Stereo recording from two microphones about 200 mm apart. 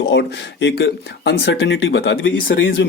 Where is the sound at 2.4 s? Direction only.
55° left (ahead or behind).